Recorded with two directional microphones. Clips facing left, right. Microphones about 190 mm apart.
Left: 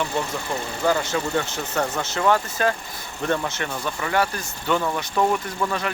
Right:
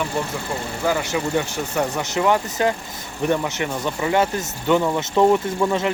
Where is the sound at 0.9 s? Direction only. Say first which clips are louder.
Even; 15° right (ahead or behind).